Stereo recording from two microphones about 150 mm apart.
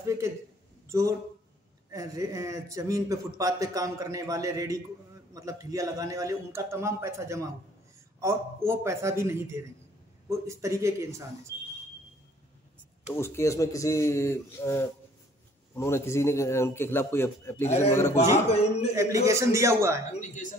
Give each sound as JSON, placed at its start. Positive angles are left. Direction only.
{"t": 0.0, "sound": "a sound", "side_deg": -20}
{"t": 0.8, "sound": "a man's voice", "side_deg": -20}
{"t": 13.1, "sound": "a man's voice", "side_deg": 15}
{"t": 18.5, "sound": "a man's voice", "side_deg": 45}
{"t": 19.2, "sound": "a man's voice", "side_deg": -20}
{"t": 20.1, "sound": "speech", "side_deg": 60}